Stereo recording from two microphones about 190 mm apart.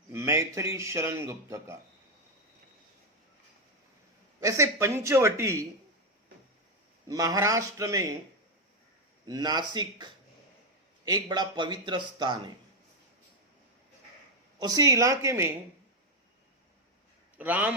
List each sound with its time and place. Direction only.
0.1 s a man's voice: 15° right (ahead or behind)
4.4 s a man's voice: 15° right (ahead or behind)
7.1 s a man's voice: 20° right (ahead or behind)
9.2 s a man's voice: 20° right (ahead or behind)
14.6 s a man's voice: 20° right (ahead or behind)
17.3 s a man's voice: 10° right (ahead or behind)